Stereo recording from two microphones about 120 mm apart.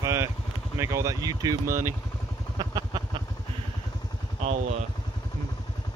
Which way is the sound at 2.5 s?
40° right (ahead or behind).